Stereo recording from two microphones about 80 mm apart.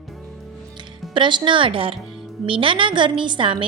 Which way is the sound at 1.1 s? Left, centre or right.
Right.